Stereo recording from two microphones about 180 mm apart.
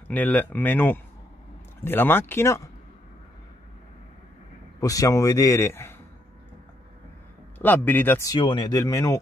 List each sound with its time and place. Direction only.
0.1 s speech: 10° left (ahead or behind)
4.7 s speech: 20° left (ahead or behind)
7.5 s speech: 10° left (ahead or behind)